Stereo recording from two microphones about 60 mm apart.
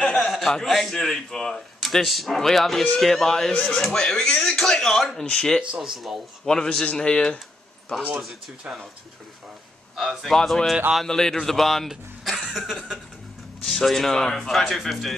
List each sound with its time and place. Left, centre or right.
0.0 s a sound: centre
0.3 s a man's voice: centre
5.2 s speech: centre
5.8 s speech: centre
6.4 s a man's voice: centre
7.9 s a man's voice: centre
8.6 s speech: centre
9.9 s speech: centre
13.7 s speech: centre